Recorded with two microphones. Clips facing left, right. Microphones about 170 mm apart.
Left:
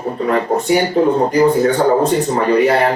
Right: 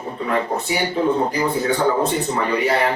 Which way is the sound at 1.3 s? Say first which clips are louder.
Left 8 dB; 45° left (ahead or behind).